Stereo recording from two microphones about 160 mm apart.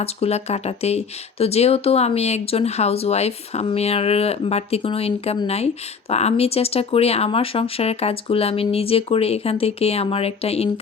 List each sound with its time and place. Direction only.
0.0 s speech: 40° left (ahead or behind)